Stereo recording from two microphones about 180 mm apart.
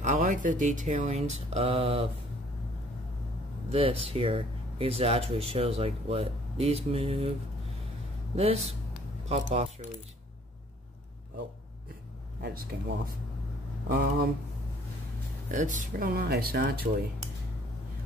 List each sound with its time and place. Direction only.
0.0 s speech: 45° right (ahead or behind)
3.7 s speech: 30° right (ahead or behind)
8.4 s speech: 35° right (ahead or behind)
12.4 s speech: 65° right (ahead or behind)
13.8 s speech: 55° right (ahead or behind)
15.5 s speech: 45° right (ahead or behind)